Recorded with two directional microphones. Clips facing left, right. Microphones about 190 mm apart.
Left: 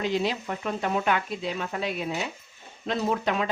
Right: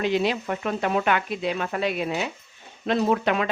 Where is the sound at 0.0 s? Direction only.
70° right (ahead or behind).